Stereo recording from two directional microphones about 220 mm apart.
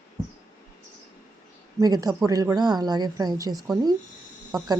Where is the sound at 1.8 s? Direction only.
15° right (ahead or behind).